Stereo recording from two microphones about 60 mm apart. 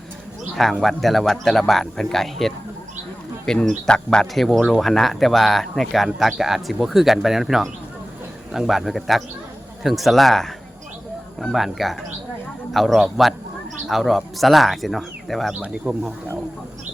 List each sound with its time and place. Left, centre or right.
0.5 s speech: centre
4.4 s speech: centre
15.6 s speech: centre